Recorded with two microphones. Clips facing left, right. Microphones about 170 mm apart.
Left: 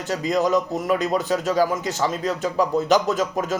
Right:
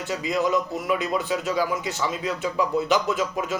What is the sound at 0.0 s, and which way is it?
Speech, 45° left (ahead or behind).